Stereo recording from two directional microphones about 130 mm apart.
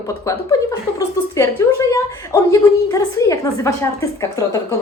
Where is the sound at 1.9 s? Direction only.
25° left (ahead or behind).